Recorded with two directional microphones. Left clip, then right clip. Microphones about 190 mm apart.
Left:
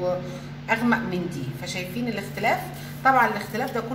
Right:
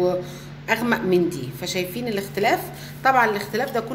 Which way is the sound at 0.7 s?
60° right (ahead or behind).